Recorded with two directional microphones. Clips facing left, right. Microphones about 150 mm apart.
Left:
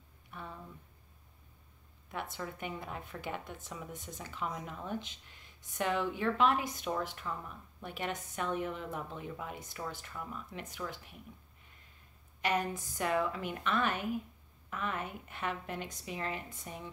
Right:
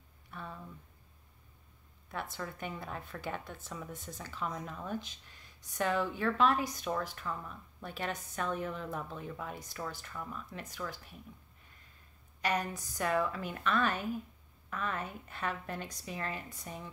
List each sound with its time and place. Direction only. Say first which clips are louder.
0.3 s speech: right 1 dB; 15° left (ahead or behind)
2.0 s a woman's voice: even; 15° left (ahead or behind)
12.4 s a woman's voice: left 1 dB; 20° left (ahead or behind)